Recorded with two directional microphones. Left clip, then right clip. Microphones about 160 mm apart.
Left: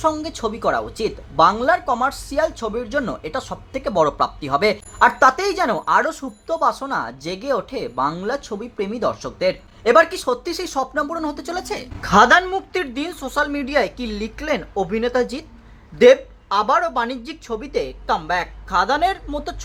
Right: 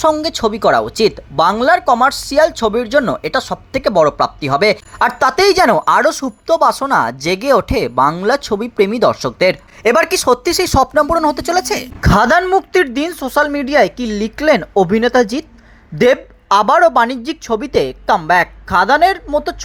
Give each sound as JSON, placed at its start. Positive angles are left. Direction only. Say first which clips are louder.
{"t": 0.2, "sound": "speech", "louder": "right 9 dB", "side_deg": -30}
{"t": 12.0, "sound": "a woman's voice", "louder": "right 1 dB", "side_deg": -45}
{"t": 12.7, "sound": "speech", "louder": "right 10 dB", "side_deg": -35}